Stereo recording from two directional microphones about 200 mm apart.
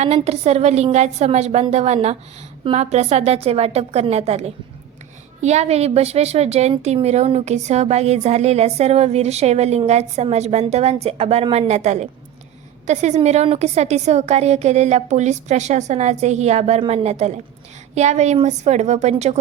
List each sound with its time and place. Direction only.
0.0 s a woman's voice: 30° right (ahead or behind)